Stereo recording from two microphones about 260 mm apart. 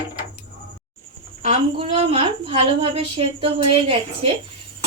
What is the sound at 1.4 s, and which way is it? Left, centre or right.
A woman's voice, right.